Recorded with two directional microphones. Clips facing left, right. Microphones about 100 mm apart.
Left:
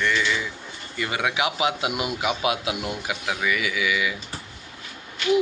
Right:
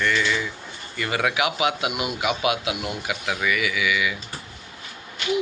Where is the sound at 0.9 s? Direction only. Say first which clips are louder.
Right 2 dB; 20° left (ahead or behind).